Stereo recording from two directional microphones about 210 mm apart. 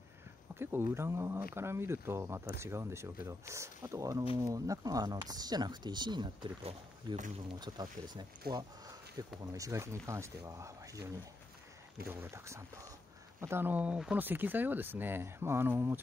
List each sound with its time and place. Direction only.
0.6 s speech: 10° right (ahead or behind)